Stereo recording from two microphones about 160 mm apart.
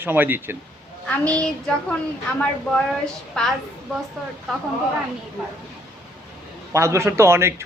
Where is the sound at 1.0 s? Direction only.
5° left (ahead or behind).